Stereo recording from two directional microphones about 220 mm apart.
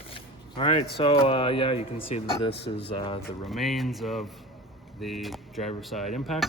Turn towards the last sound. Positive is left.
turn(degrees=0)  # may be behind; listen again after turning